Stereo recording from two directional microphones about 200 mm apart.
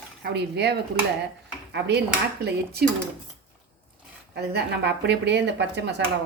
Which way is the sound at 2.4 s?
50° right (ahead or behind).